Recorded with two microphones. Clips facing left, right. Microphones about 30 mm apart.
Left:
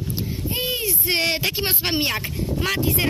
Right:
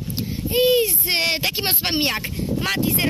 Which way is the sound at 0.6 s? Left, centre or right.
Right.